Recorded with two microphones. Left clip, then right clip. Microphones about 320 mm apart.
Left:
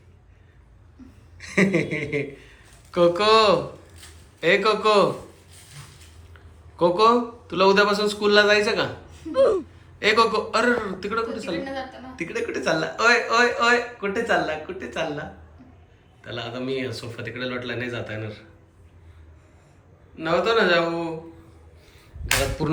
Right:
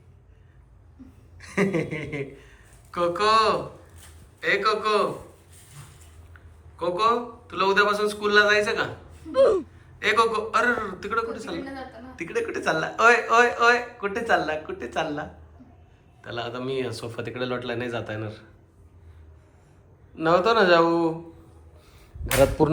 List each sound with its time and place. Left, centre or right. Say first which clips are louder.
1.4 s a man's voice: left 3 dB; centre
6.3 s a man's voice: left 7 dB; centre
20.1 s speech: right 1 dB; centre